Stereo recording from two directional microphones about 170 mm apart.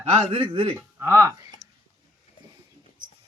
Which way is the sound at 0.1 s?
35° right (ahead or behind).